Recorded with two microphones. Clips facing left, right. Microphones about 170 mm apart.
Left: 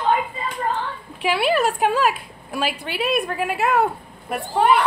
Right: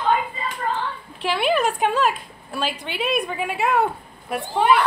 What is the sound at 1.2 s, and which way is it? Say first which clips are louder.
A woman's voice: left 1 dB; 5° left (ahead or behind).